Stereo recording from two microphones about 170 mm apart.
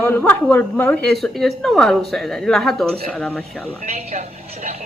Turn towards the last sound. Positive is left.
turn(degrees=5)  # may be behind; listen again after turning